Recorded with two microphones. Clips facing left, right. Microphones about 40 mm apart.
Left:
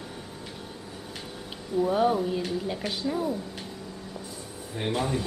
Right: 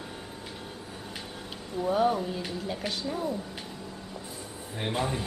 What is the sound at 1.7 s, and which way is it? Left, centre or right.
A woman's voice, centre.